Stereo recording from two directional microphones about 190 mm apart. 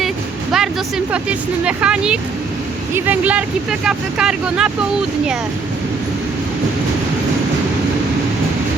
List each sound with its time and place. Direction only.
0.5 s speech: 5° right (ahead or behind)